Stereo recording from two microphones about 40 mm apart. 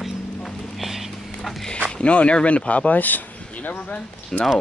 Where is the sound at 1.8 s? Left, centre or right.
Left.